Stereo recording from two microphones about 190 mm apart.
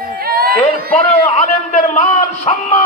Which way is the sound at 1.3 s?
40° left (ahead or behind).